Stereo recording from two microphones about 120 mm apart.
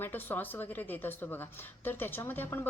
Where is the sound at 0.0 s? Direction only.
15° left (ahead or behind).